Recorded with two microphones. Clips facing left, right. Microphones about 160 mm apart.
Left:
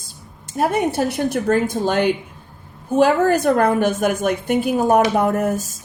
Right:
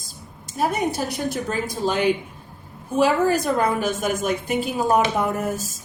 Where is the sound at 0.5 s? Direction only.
65° left (ahead or behind).